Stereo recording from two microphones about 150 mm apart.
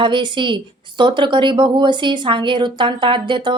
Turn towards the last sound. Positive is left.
turn(degrees=-30)  # may be behind; listen again after turning